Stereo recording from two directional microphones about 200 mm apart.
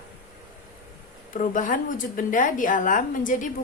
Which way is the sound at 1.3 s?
40° left (ahead or behind).